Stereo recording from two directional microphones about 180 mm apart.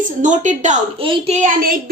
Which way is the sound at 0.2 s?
45° right (ahead or behind).